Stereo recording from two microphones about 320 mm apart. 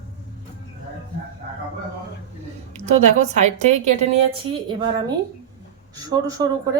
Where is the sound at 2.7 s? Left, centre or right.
Right.